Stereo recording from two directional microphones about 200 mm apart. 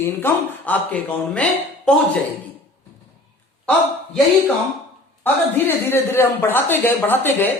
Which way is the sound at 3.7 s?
5° left (ahead or behind).